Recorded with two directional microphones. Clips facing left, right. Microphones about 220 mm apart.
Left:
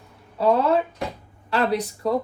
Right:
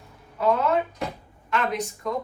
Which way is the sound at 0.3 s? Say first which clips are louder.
Left 3 dB; 35° left (ahead or behind).